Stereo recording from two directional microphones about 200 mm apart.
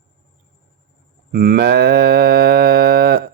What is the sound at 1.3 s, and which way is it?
Livestock, 50° right (ahead or behind).